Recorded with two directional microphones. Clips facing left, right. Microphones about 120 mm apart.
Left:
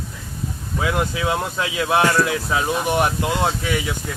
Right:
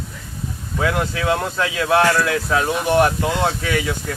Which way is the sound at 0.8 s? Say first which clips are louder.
Right 1 dB; 15° left (ahead or behind).